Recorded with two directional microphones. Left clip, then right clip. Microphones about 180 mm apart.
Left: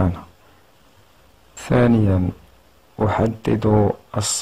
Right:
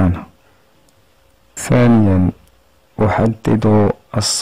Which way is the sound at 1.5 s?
40° right (ahead or behind).